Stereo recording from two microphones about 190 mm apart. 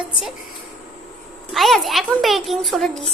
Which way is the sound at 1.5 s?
Centre (ahead or behind).